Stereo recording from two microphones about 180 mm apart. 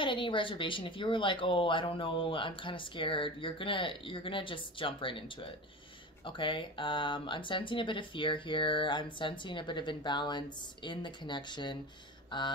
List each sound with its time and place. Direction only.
0.0 s speech: 30° left (ahead or behind)